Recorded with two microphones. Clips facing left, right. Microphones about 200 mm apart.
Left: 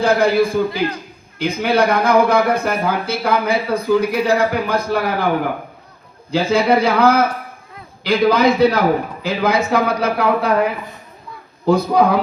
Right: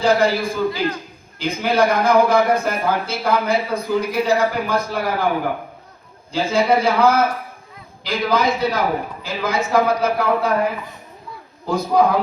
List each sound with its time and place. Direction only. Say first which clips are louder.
0.0 s speech: left 3 dB; 55° left (ahead or behind)
6.3 s speech: left 2 dB; 60° left (ahead or behind)